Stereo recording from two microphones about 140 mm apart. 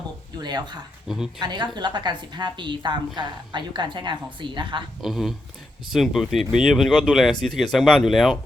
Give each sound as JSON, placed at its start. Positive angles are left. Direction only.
{"t": 0.3, "sound": "speech", "side_deg": -30}
{"t": 1.0, "sound": "speech", "side_deg": 0}
{"t": 1.4, "sound": "a woman's voice", "side_deg": -30}
{"t": 4.9, "sound": "speech", "side_deg": 0}